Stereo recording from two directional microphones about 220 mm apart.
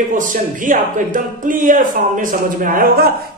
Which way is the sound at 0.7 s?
35° right (ahead or behind).